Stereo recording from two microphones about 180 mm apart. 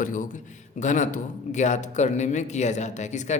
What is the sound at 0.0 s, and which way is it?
A man's voice, 45° left (ahead or behind).